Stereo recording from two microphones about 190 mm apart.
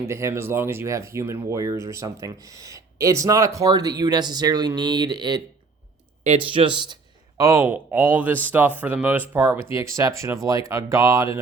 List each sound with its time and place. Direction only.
0.0 s a man's voice: 15° right (ahead or behind)